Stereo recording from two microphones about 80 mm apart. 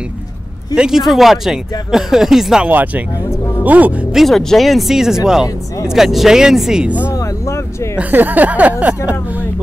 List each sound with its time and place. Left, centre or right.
0.7 s speech: centre
2.7 s speech: right
4.1 s speech: centre
7.2 s music: left
8.0 s speech: right